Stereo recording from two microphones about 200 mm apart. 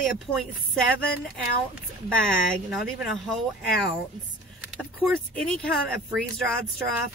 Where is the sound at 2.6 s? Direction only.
Centre (ahead or behind).